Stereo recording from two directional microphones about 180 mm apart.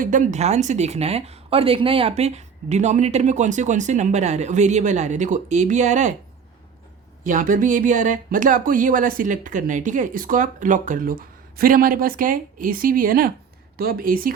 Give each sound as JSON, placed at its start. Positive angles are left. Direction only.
{"t": 0.0, "sound": "speech", "side_deg": -45}
{"t": 7.3, "sound": "speech", "side_deg": -45}